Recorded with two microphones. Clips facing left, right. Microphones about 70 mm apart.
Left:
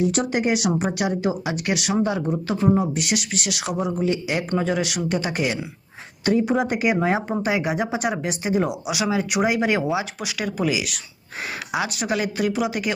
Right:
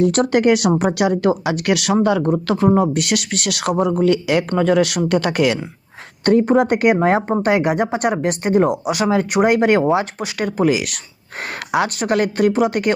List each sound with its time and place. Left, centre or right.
0.0 s speech: right
6.2 s speech: right